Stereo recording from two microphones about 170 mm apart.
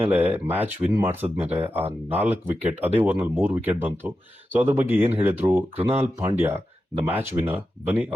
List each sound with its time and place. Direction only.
0.1 s speech: 10° right (ahead or behind)